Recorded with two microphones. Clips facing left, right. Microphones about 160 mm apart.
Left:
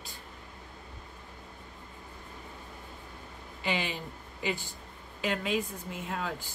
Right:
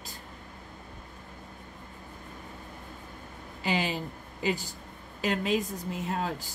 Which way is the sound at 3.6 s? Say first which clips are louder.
Right 3 dB; 40° right (ahead or behind).